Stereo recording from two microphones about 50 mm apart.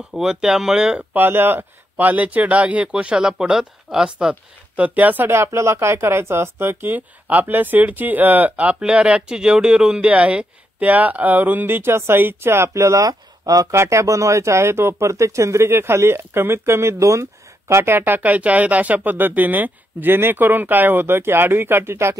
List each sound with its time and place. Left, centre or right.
0.1 s speech: centre
1.1 s speech: right; by 4.4 s centre
4.7 s speech: right
5.2 s speech: right
8.8 s speech: right
15.7 s speech: right